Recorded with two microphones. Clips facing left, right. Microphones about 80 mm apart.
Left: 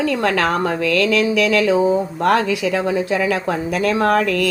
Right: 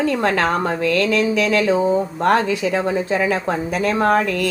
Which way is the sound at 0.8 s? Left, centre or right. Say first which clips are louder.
Left 1 dB; centre.